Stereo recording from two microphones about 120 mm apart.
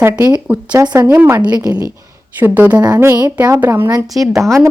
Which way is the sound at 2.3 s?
15° right (ahead or behind).